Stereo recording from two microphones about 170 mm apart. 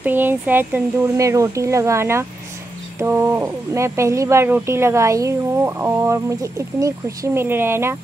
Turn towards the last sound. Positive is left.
turn(degrees=-15)  # may be behind; listen again after turning